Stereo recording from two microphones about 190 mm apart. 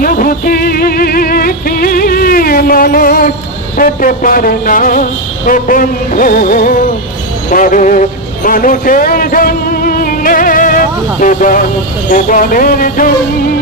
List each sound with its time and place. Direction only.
0.0 s music: 45° left (ahead or behind)